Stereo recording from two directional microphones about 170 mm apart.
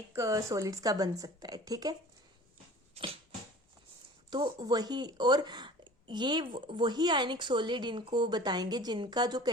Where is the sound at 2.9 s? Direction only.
35° right (ahead or behind).